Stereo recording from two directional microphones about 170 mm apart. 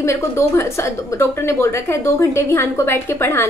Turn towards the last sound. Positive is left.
turn(degrees=15)  # may be behind; listen again after turning